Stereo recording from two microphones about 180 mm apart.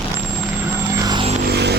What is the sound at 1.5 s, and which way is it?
Vehicle, 65° right (ahead or behind).